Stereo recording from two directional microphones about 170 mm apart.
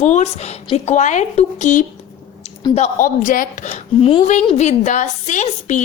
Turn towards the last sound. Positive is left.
turn(degrees=45)  # may be behind; listen again after turning